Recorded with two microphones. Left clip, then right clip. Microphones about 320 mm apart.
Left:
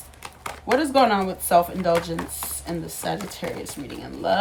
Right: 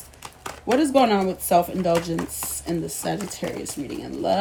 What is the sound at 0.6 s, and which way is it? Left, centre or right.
A woman's voice, left.